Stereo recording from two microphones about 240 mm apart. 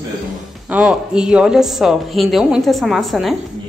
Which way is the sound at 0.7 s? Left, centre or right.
Centre.